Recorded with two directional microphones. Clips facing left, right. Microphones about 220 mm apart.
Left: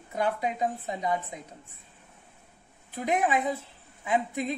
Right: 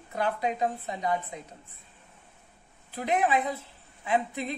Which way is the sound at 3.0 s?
15° left (ahead or behind).